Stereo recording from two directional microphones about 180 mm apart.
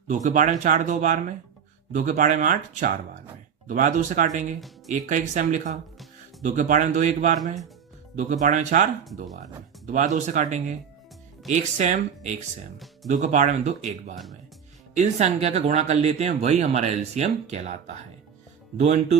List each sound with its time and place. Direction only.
0.1 s speech: 45° right (ahead or behind)